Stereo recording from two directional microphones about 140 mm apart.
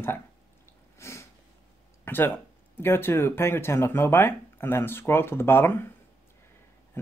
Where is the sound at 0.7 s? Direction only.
20° left (ahead or behind).